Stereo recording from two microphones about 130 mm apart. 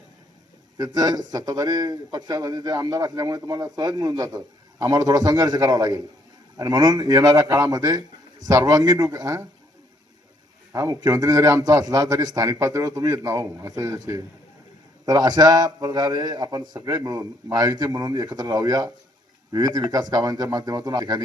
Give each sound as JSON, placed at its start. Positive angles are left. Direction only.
{"t": 0.8, "sound": "a man's voice", "side_deg": -30}
{"t": 10.7, "sound": "a man's voice", "side_deg": -25}